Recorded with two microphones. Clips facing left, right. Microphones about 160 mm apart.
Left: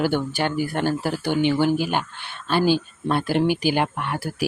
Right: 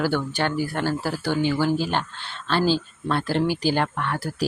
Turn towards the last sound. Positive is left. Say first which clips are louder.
# even
turn(degrees=15)  # may be behind; listen again after turning